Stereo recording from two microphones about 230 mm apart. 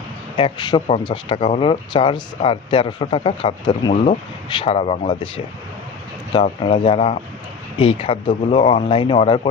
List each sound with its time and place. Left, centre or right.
0.4 s speech: left
6.3 s speech: left